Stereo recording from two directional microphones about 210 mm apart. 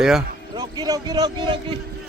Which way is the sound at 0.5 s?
20° right (ahead or behind).